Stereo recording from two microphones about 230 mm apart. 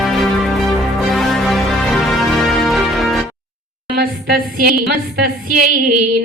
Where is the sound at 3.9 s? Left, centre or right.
Right.